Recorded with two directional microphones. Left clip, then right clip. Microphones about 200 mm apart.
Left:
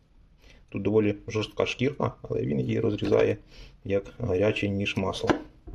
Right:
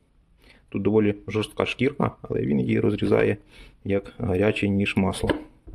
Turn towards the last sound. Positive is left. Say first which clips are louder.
# right 4 dB
turn(degrees=-30)  # may be behind; listen again after turning